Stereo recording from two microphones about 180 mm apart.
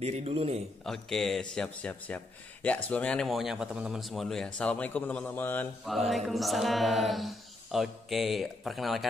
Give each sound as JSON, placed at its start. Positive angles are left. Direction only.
{"t": 0.0, "sound": "a man's voice", "side_deg": -35}
{"t": 0.8, "sound": "speech", "side_deg": 0}
{"t": 5.9, "sound": "speech", "side_deg": 0}